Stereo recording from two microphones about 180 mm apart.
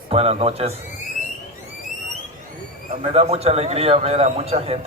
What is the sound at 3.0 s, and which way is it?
A man's voice, 35° right (ahead or behind).